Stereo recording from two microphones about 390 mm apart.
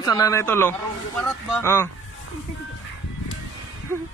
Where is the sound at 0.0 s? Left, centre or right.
Centre.